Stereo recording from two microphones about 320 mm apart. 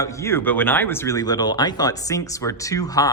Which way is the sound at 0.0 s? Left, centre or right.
Centre.